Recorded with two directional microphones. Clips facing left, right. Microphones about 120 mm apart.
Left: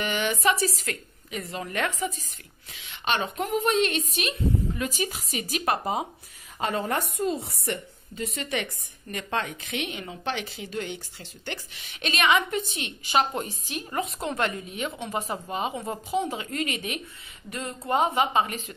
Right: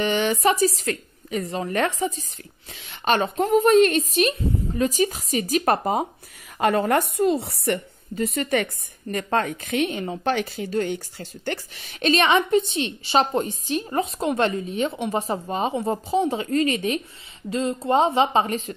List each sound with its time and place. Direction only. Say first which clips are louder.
0.0 s a woman's voice: right 5 dB; 30° right (ahead or behind)
6.6 s a woman's voice: right 7 dB; 65° right (ahead or behind)
8.4 s a woman's voice: right 7 dB; 45° right (ahead or behind)
17.5 s speech: right 7 dB; 25° right (ahead or behind)